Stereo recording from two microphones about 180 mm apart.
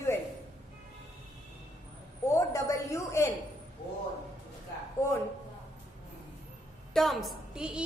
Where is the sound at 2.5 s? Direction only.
15° left (ahead or behind).